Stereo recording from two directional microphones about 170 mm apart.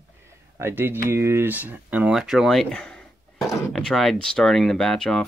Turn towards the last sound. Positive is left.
turn(degrees=5)  # may be behind; listen again after turning